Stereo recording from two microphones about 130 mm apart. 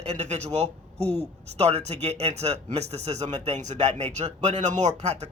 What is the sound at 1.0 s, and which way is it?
Speech, 15° left (ahead or behind).